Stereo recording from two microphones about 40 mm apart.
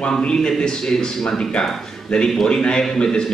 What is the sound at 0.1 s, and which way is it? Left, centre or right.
Speech, centre.